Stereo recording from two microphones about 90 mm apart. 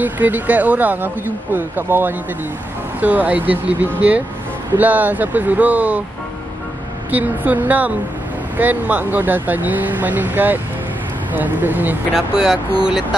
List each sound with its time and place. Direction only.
0.0 s speech: 20° right (ahead or behind)
7.1 s speech: 20° right (ahead or behind)
12.1 s speech: 5° right (ahead or behind)